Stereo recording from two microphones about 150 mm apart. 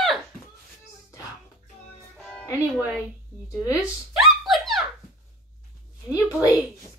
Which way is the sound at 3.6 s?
20° left (ahead or behind).